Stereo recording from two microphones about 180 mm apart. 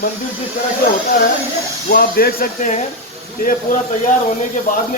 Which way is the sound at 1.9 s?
55° left (ahead or behind).